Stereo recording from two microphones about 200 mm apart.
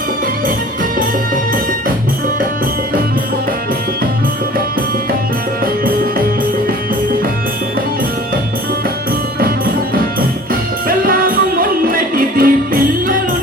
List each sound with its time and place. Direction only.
5.8 s music: 45° right (ahead or behind)
9.4 s music: 45° right (ahead or behind)